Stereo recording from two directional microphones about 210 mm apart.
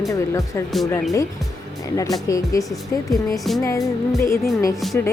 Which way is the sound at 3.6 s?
15° left (ahead or behind).